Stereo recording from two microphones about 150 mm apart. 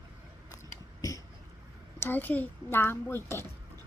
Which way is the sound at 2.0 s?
15° left (ahead or behind).